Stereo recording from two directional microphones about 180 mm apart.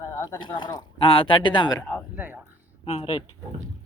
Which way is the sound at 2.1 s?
10° right (ahead or behind).